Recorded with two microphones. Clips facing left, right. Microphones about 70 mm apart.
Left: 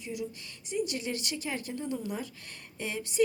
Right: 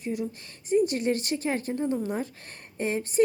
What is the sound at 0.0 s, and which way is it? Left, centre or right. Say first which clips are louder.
Speech: right 6 dB; right.